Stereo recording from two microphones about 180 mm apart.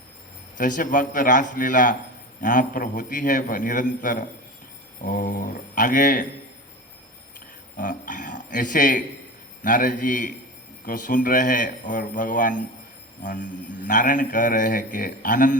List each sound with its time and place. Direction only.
0.5 s mantra: 45° left (ahead or behind)
7.8 s speech: 50° left (ahead or behind)
9.6 s mantra: 50° left (ahead or behind)